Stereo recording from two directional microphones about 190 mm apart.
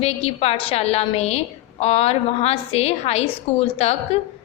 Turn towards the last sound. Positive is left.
turn(degrees=30)  # may be behind; listen again after turning